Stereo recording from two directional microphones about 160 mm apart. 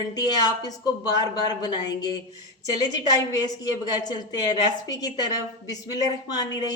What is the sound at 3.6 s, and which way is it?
Speech, 25° left (ahead or behind).